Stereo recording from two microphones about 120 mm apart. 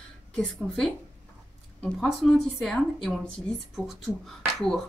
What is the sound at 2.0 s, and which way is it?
Speech, centre (ahead or behind).